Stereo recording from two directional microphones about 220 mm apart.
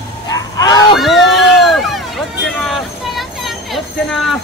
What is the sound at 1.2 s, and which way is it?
Speech, centre (ahead or behind).